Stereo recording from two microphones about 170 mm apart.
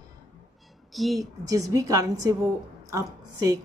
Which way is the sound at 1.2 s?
20° right (ahead or behind).